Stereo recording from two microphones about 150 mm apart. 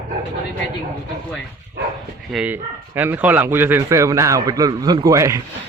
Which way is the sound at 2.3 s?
Centre (ahead or behind).